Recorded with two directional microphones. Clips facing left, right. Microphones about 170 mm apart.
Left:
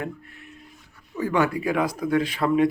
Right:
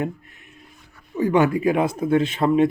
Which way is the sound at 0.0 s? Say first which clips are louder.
Right 5 dB; 20° right (ahead or behind).